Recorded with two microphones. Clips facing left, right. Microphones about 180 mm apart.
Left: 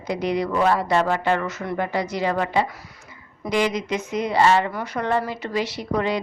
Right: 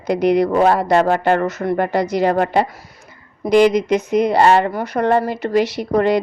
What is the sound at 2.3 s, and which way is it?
Speech, 55° right (ahead or behind).